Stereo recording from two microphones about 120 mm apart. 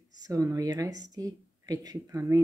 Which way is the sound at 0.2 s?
30° right (ahead or behind).